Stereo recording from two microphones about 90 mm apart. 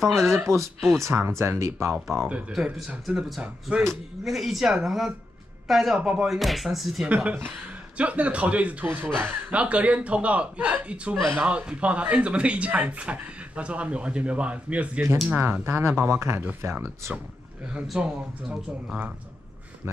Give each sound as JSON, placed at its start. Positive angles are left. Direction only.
{"t": 0.3, "sound": "speech", "side_deg": -30}
{"t": 0.7, "sound": "speech", "side_deg": -5}
{"t": 1.0, "sound": "speech", "side_deg": -30}
{"t": 2.2, "sound": "speech", "side_deg": -10}
{"t": 5.9, "sound": "speech", "side_deg": -15}
{"t": 6.2, "sound": "speech", "side_deg": 0}
{"t": 7.1, "sound": "speech", "side_deg": -15}
{"t": 8.8, "sound": "speech", "side_deg": -25}
{"t": 15.3, "sound": "speech", "side_deg": -25}
{"t": 17.8, "sound": "speech", "side_deg": -10}